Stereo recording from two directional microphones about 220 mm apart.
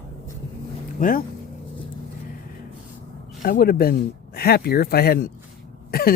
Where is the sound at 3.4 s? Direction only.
45° left (ahead or behind).